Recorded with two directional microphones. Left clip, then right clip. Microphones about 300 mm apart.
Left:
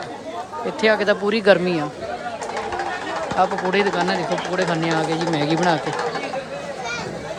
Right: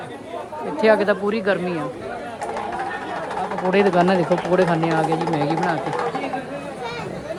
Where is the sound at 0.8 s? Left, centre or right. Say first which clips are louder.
Right 1 dB; centre.